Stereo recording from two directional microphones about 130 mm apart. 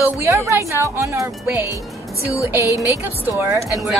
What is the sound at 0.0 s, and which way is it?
Speech, 20° right (ahead or behind).